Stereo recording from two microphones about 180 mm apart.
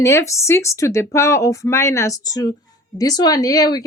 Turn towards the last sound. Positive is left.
turn(degrees=20)  # may be behind; listen again after turning